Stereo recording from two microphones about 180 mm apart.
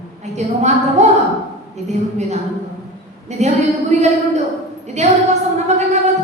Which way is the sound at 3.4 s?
40° right (ahead or behind).